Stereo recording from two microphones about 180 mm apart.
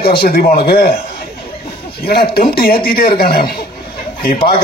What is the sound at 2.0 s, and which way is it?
Speech, 60° left (ahead or behind).